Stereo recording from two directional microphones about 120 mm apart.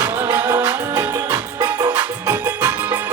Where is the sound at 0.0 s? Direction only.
20° right (ahead or behind).